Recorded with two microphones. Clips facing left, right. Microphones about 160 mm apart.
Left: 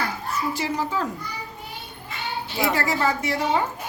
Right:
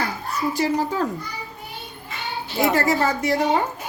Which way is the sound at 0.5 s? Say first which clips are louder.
Right 4 dB; 40° right (ahead or behind).